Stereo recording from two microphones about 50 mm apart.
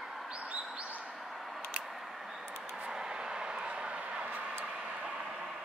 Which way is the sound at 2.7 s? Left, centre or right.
Centre.